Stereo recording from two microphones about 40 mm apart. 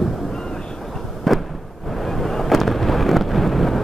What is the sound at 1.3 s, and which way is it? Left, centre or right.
Vehicle, centre.